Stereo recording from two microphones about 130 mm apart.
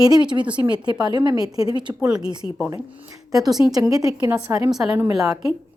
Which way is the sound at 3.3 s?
30° right (ahead or behind).